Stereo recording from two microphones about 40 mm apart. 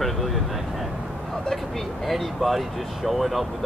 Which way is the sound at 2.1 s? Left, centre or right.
Centre.